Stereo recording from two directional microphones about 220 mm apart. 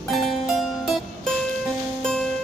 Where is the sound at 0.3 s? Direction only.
Centre (ahead or behind).